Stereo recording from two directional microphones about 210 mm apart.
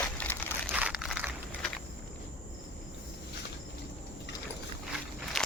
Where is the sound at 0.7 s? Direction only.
5° right (ahead or behind).